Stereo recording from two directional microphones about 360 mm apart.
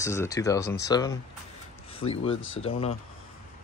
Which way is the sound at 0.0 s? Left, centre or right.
Centre.